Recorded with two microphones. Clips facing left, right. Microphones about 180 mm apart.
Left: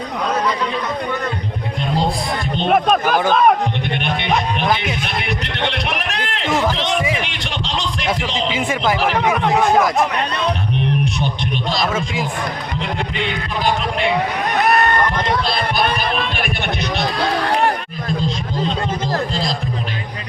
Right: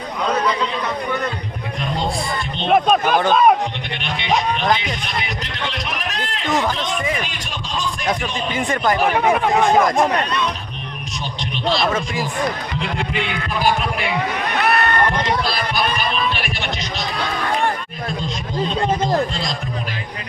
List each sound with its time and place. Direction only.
2.6 s speech: centre (ahead or behind)
5.0 s music: 65° left (ahead or behind)
6.7 s a man's voice: 70° left (ahead or behind); by 8.5 s 85° left
8.5 s speech: 5° left (ahead or behind)
11.9 s speech: 5° left (ahead or behind)
14.5 s a sound: 40° left (ahead or behind)
17.3 s music: 70° left (ahead or behind)
19.3 s speech: 35° left (ahead or behind)